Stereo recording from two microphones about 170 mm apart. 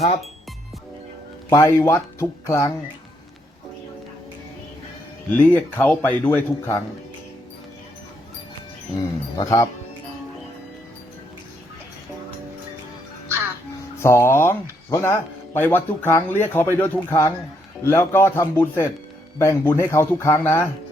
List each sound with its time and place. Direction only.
1.5 s speech: 15° left (ahead or behind)
5.3 s speech: 10° left (ahead or behind)
9.4 s speech: 20° left (ahead or behind)
14.0 s speech: 15° left (ahead or behind)